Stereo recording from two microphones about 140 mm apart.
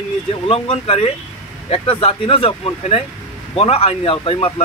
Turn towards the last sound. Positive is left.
turn(degrees=40)  # may be behind; listen again after turning